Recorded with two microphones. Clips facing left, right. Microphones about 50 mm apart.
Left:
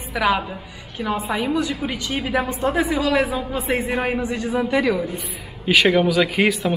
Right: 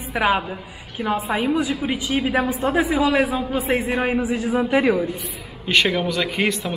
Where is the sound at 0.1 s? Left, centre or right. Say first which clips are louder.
Even; centre.